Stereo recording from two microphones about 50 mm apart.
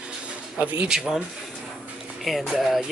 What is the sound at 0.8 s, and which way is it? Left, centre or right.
Speech, centre.